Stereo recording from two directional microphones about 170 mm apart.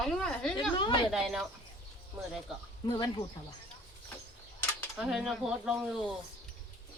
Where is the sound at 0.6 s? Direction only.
30° left (ahead or behind).